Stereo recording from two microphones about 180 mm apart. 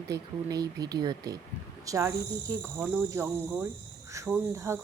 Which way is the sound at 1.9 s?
15° right (ahead or behind).